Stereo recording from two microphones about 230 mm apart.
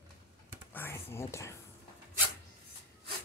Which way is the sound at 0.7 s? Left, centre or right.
Centre.